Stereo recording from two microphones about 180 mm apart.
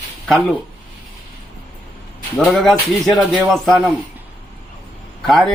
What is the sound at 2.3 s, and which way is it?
Speech, centre (ahead or behind).